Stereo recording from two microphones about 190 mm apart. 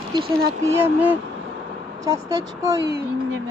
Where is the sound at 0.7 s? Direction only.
10° right (ahead or behind).